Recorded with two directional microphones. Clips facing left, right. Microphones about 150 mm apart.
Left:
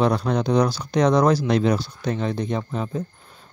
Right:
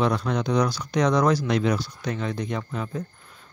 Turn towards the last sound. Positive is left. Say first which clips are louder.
# left 4 dB
turn(degrees=25)  # may be behind; listen again after turning